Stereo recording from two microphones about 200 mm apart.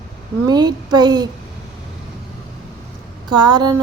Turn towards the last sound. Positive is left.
turn(degrees=-20)  # may be behind; listen again after turning